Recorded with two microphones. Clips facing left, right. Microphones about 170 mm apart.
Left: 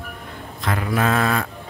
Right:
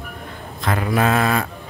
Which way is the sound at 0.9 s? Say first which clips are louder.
Right 2 dB; 15° right (ahead or behind).